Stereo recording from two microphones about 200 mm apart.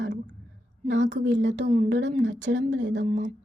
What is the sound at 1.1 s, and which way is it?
Speech, 60° right (ahead or behind).